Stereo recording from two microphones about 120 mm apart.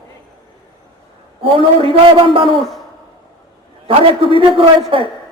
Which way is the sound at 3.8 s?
50° right (ahead or behind).